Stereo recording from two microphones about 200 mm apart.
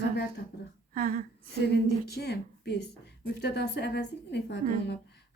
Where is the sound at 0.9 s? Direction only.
45° right (ahead or behind).